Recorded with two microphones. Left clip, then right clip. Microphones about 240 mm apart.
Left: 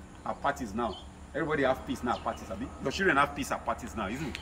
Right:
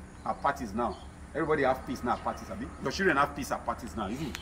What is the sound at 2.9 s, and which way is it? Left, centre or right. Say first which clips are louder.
Speech: left 1 dB; centre.